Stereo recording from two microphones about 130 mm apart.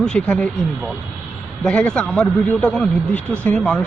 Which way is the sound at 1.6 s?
5° left (ahead or behind).